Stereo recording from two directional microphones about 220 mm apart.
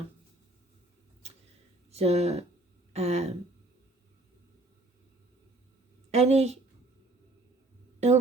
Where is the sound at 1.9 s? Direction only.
30° right (ahead or behind).